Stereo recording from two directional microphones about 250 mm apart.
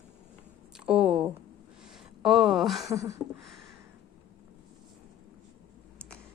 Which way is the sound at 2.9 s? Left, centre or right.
Centre.